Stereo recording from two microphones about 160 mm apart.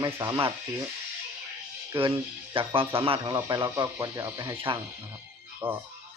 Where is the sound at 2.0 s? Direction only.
35° right (ahead or behind).